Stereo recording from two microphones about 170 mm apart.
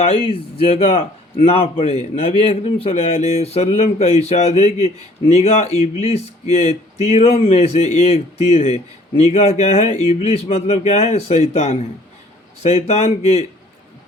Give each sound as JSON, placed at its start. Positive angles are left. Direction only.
{"t": 0.3, "sound": "speech", "side_deg": 35}